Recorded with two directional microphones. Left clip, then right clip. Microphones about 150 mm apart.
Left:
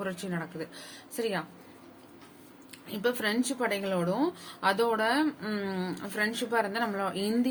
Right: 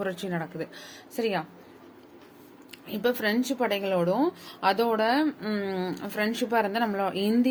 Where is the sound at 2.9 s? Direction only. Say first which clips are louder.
Right 3 dB; 30° right (ahead or behind).